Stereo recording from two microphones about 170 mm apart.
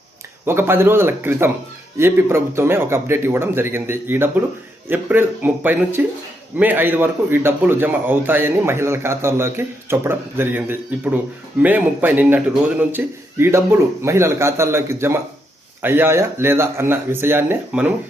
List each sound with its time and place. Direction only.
0.4 s a man's voice: 15° right (ahead or behind)